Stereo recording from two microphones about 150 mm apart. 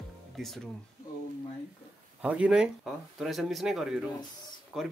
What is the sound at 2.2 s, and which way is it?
Speech, 10° right (ahead or behind).